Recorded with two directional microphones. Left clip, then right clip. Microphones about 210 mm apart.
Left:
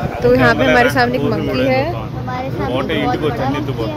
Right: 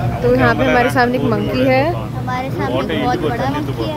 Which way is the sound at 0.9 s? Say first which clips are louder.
Even; 15° right (ahead or behind).